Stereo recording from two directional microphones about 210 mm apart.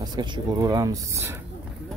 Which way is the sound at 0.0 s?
20° right (ahead or behind).